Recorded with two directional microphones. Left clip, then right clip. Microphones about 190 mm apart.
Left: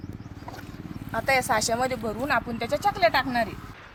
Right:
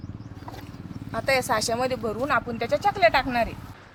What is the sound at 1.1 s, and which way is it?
Speech, 20° right (ahead or behind).